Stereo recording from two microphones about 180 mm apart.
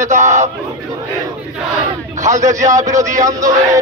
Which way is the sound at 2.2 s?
45° right (ahead or behind).